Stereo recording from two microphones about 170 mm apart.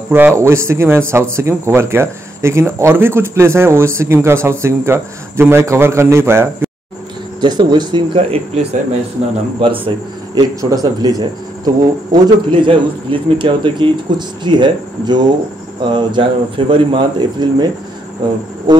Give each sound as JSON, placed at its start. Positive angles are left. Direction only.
{"t": 0.1, "sound": "speech", "side_deg": -15}
{"t": 7.3, "sound": "speech", "side_deg": -25}
{"t": 9.6, "sound": "speech", "side_deg": -30}
{"t": 18.7, "sound": "speech", "side_deg": -25}